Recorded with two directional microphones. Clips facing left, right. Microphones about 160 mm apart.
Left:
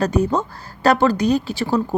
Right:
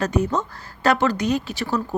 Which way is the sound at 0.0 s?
35° left (ahead or behind).